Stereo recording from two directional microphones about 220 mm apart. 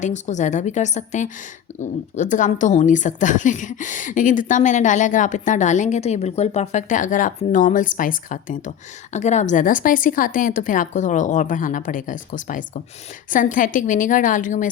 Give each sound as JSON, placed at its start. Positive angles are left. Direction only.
{"t": 0.0, "sound": "speech", "side_deg": 35}